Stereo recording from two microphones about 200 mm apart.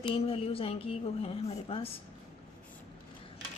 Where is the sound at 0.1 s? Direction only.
30° left (ahead or behind).